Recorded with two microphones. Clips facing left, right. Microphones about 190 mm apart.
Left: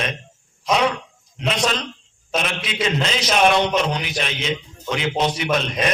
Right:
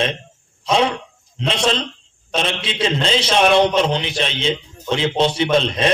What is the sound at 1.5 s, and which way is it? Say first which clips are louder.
A man's voice: right 2 dB; 30° right (ahead or behind).